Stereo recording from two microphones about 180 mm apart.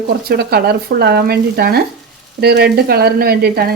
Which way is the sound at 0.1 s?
60° right (ahead or behind).